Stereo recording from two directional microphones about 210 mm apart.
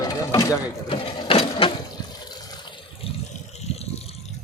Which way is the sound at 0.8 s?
25° left (ahead or behind).